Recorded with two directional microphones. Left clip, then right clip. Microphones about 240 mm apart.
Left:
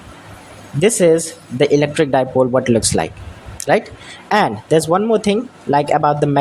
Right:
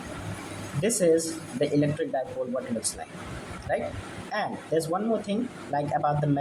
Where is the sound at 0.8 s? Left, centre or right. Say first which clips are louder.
Left 11 dB; left.